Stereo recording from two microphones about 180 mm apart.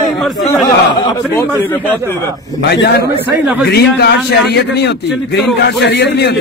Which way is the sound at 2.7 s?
65° left (ahead or behind).